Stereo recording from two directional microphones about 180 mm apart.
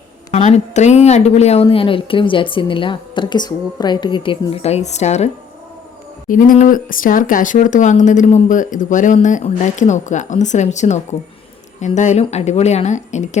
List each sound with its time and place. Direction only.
0.3 s speech: 40° left (ahead or behind)